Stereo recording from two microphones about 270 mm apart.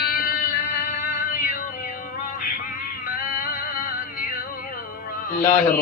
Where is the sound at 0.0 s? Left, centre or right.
Left.